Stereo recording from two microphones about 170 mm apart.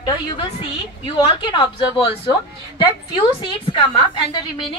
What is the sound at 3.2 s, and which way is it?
A woman's voice, 30° left (ahead or behind).